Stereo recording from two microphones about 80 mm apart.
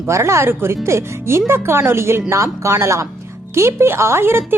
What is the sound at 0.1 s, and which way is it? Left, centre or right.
Speech, right.